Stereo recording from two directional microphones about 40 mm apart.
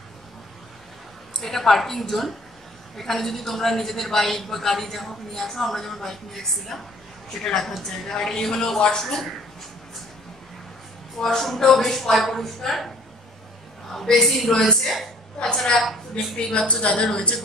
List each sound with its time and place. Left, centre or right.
1.4 s a woman's voice: centre
9.0 s speech: centre
11.1 s a woman's voice: centre
13.9 s a woman's voice: centre
14.7 s a woman's voice: centre
15.8 s a woman's voice: centre
16.3 s a woman's voice: left